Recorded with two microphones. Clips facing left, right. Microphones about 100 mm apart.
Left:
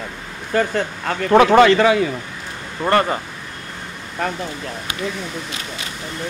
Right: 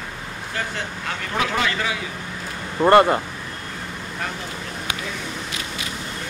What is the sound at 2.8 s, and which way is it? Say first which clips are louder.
Speech: right 4 dB; 15° right (ahead or behind).